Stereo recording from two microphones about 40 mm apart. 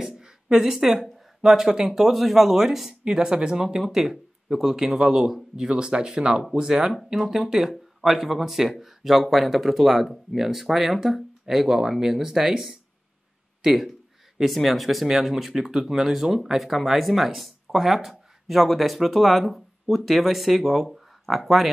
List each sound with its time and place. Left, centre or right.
0.0 s a sound: centre
1.0 s a man's voice: centre
3.0 s speech: centre
3.9 s a man's voice: centre
14.4 s speech: centre
20.9 s a sound: centre